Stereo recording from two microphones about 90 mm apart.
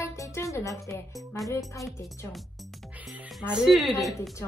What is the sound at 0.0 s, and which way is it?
Music, 35° left (ahead or behind).